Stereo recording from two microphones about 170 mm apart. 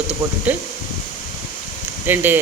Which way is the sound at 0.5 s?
10° right (ahead or behind).